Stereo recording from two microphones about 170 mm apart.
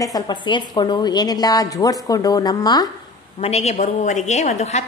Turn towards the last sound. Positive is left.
turn(degrees=40)  # may be behind; listen again after turning